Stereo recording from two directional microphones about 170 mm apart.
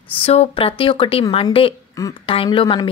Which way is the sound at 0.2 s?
35° left (ahead or behind).